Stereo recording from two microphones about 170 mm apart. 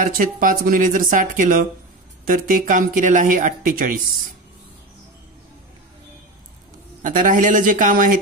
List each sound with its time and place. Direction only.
0.0 s speech: 55° right (ahead or behind)
7.0 s speech: 50° right (ahead or behind)